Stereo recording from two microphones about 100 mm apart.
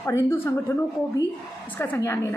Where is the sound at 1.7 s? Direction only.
20° left (ahead or behind).